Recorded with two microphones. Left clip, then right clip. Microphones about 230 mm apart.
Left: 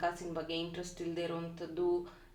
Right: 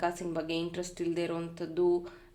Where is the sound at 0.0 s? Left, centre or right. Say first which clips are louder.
Right 4 dB; right.